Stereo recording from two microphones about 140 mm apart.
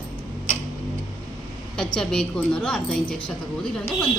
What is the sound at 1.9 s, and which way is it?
A woman's voice, 5° left (ahead or behind).